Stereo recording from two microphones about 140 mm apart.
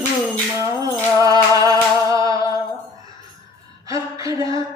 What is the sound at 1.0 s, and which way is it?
Music, 25° right (ahead or behind).